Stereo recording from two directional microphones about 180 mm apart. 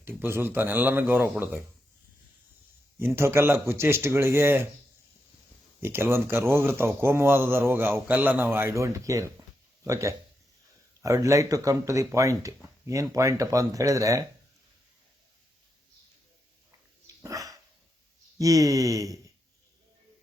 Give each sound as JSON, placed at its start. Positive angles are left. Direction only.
{"t": 0.0, "sound": "speech", "side_deg": -10}
{"t": 3.0, "sound": "speech", "side_deg": -15}
{"t": 5.8, "sound": "speech", "side_deg": -15}
{"t": 17.2, "sound": "dog", "side_deg": -20}
{"t": 18.3, "sound": "speech", "side_deg": -20}